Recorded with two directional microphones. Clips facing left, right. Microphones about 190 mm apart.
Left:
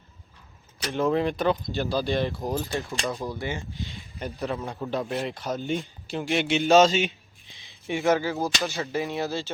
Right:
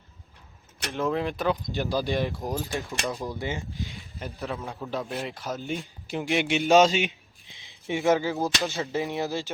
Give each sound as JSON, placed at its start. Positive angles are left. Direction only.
{"t": 0.9, "sound": "speech", "side_deg": 0}
{"t": 1.6, "sound": "speech", "side_deg": -15}
{"t": 2.4, "sound": "speech", "side_deg": 0}
{"t": 3.2, "sound": "speech", "side_deg": -20}
{"t": 4.2, "sound": "speech", "side_deg": 0}
{"t": 6.1, "sound": "speech", "side_deg": -15}